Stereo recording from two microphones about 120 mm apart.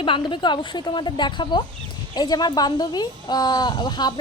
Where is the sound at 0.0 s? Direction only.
45° left (ahead or behind).